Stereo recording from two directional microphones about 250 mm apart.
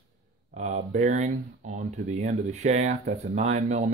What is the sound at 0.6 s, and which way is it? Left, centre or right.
Speech, right.